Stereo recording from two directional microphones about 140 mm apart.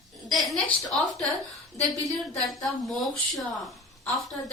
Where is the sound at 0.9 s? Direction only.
Centre (ahead or behind).